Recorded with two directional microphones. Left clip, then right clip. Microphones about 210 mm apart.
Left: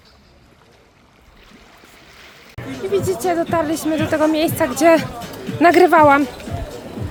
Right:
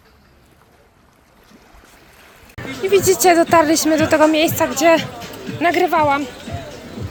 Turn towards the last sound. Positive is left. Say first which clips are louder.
# left 5 dB
turn(degrees=30)  # may be behind; listen again after turning